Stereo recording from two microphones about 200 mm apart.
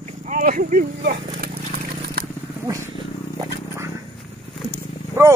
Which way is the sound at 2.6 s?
15° right (ahead or behind).